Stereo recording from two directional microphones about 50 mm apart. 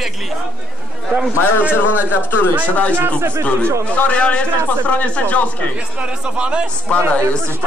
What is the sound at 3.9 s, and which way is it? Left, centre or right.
A man's voice, left.